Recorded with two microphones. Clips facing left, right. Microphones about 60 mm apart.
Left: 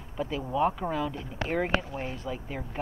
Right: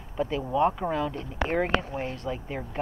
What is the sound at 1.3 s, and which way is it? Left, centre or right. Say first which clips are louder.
Speech: right 3 dB; centre.